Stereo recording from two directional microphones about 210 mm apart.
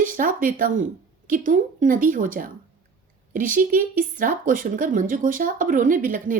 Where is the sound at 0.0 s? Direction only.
40° right (ahead or behind).